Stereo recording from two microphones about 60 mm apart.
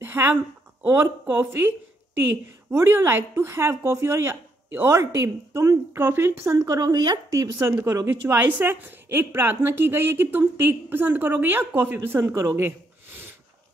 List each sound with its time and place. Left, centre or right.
0.0 s a sound: right
1.3 s speech: right
2.7 s speech: right
6.1 s speech: right
7.5 s speech: right
8.4 s a woman's voice: right
12.4 s speech: right